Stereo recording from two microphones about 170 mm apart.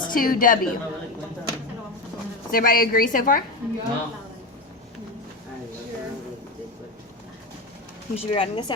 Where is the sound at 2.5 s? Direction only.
60° left (ahead or behind).